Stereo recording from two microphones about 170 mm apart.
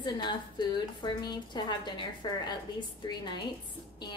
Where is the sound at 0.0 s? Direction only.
25° left (ahead or behind).